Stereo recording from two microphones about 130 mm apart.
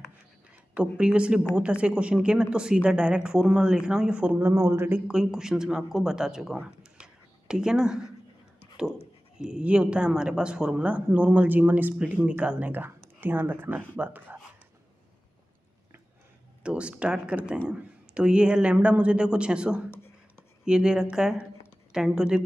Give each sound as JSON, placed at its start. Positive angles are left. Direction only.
{"t": 0.7, "sound": "speech", "side_deg": -10}
{"t": 9.4, "sound": "speech", "side_deg": -10}
{"t": 16.6, "sound": "speech", "side_deg": -10}